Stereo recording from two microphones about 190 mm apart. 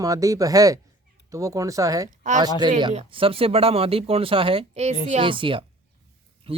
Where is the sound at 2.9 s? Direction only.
30° right (ahead or behind).